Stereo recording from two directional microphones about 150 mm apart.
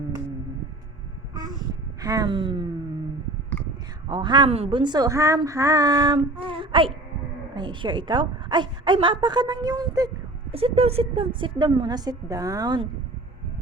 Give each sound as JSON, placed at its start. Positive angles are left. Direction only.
{"t": 2.0, "sound": "a woman's voice", "side_deg": -25}
{"t": 4.1, "sound": "a woman's voice", "side_deg": -30}
{"t": 10.5, "sound": "a woman's voice", "side_deg": -40}